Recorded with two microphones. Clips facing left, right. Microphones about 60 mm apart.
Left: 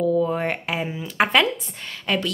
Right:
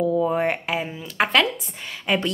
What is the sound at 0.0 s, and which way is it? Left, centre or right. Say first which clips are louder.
Speech: even; centre.